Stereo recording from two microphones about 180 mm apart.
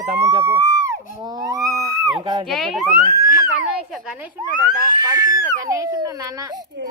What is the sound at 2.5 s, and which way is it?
Speech, centre (ahead or behind).